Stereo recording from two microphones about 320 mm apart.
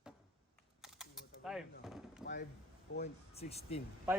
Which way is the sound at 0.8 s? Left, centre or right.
Centre.